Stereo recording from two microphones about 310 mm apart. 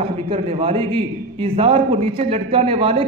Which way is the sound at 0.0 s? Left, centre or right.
Centre.